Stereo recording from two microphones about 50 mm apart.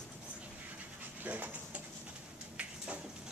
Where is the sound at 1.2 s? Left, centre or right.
Right.